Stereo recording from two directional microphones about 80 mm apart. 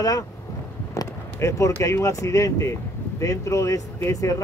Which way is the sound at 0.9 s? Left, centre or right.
Left.